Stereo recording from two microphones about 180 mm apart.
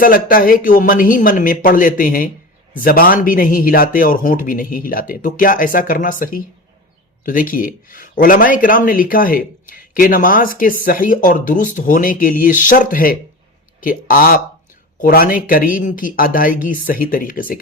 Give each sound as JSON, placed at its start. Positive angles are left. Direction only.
{"t": 0.0, "sound": "speech", "side_deg": 50}